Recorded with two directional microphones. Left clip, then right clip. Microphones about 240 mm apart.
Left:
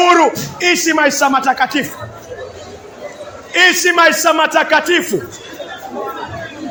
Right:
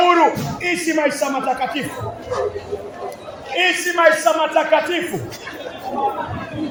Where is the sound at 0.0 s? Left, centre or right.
Left.